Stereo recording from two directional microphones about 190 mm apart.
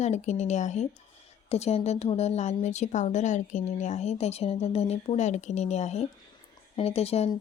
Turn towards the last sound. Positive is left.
turn(degrees=35)  # may be behind; listen again after turning